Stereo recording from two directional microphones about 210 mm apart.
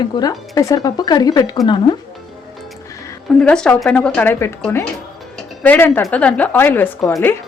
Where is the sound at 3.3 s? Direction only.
5° left (ahead or behind).